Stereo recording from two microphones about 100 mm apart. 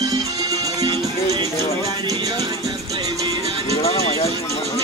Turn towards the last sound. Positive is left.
turn(degrees=90)